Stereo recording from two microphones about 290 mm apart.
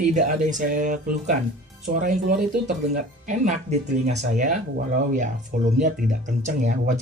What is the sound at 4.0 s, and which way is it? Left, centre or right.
Speech, right.